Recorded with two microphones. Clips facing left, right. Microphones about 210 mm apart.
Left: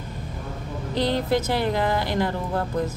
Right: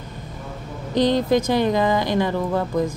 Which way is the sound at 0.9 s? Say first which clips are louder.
Right 5 dB; 15° right (ahead or behind).